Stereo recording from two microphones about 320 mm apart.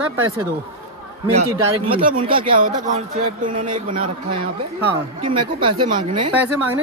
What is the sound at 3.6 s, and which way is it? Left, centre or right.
Speech, right.